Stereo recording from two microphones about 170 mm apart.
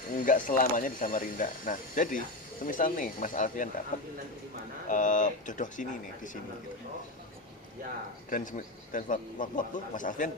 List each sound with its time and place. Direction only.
0.3 s a man's voice: 50° left (ahead or behind)
8.3 s a man's voice: 50° left (ahead or behind)